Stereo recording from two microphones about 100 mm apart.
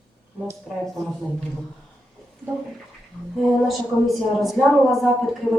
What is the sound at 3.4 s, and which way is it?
Speech, centre (ahead or behind).